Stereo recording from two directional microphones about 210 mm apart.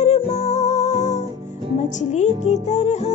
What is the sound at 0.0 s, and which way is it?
Music, 30° left (ahead or behind).